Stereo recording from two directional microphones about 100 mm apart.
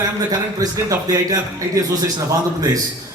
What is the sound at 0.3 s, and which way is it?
A man's voice, 40° right (ahead or behind).